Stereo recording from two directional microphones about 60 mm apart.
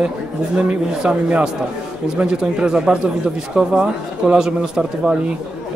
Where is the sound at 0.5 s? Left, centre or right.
Centre.